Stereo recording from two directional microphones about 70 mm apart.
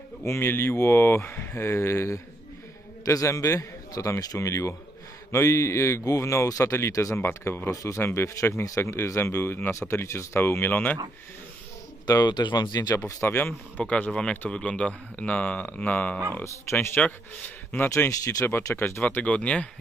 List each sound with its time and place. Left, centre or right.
0.2 s a man's voice: left
7.2 s speech: left
7.7 s speech: left
8.0 s speech: left
12.1 s speech: left
12.9 s speech: left
13.3 s speech: left
17.8 s speech: left
19.0 s speech: centre